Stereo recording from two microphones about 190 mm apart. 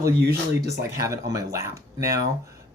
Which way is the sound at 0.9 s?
15° right (ahead or behind).